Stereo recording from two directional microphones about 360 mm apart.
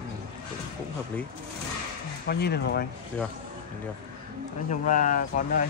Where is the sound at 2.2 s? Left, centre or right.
Left.